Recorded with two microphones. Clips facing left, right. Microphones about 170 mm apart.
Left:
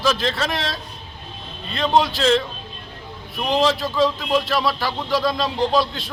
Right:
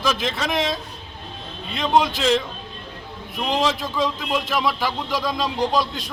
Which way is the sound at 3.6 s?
15° right (ahead or behind).